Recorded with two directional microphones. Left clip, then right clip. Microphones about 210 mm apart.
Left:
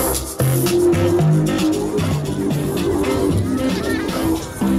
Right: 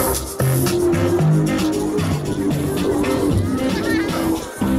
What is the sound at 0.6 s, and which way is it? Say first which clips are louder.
Music: left 3 dB; 50° left (ahead or behind).